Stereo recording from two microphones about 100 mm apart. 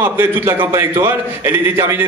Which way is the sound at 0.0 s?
20° right (ahead or behind).